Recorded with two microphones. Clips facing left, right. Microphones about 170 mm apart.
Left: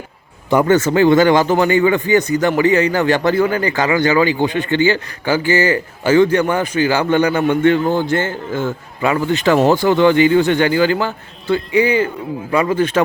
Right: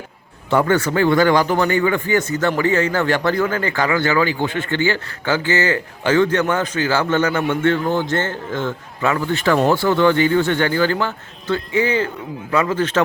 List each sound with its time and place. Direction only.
0.5 s a man's voice: 20° left (ahead or behind)